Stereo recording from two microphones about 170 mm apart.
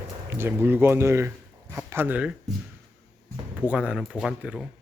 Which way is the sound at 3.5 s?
10° right (ahead or behind).